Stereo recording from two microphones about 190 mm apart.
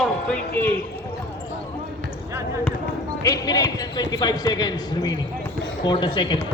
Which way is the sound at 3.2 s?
20° left (ahead or behind).